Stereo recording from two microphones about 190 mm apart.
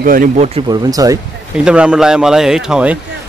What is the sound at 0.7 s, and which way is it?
Speech, 20° right (ahead or behind).